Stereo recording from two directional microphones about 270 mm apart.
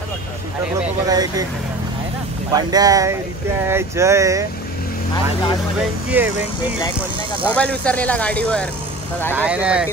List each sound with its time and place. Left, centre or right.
1.0 s speech: centre
2.5 s speech: centre
5.1 s speech: centre
5.8 s speech: centre
7.4 s speech: centre